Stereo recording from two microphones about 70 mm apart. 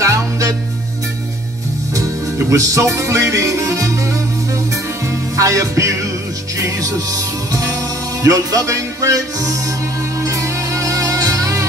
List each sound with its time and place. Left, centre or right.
0.0 s music: right
2.0 s music: right